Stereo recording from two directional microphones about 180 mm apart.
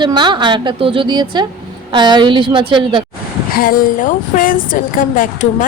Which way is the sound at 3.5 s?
55° left (ahead or behind).